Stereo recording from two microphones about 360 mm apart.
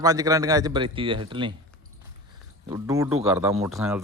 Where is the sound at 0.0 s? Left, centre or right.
Centre.